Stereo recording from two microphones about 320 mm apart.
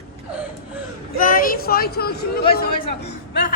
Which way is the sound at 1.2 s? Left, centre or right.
Left.